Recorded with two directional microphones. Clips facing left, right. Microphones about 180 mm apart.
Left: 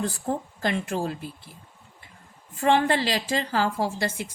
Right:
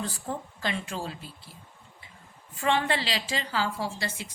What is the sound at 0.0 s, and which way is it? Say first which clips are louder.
A woman's voice: left 6 dB; 45° left (ahead or behind).